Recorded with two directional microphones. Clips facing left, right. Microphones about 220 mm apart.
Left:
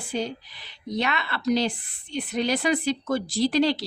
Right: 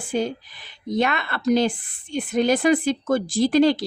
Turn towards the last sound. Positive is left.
turn(degrees=-50)  # may be behind; listen again after turning